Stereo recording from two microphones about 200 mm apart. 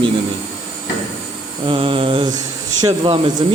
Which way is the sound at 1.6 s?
25° right (ahead or behind).